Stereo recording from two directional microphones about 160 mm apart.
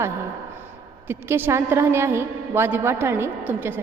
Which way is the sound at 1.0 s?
15° right (ahead or behind).